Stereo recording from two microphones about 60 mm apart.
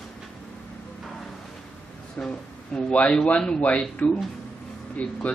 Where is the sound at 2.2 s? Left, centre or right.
Left.